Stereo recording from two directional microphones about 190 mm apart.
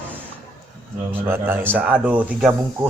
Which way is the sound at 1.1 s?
10° right (ahead or behind).